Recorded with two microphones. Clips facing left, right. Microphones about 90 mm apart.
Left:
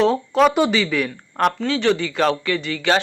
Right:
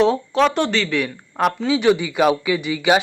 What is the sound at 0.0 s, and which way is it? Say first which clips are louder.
Speech: even; centre (ahead or behind).